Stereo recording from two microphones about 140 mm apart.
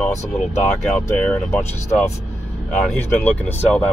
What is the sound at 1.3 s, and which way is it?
Speech, 15° left (ahead or behind).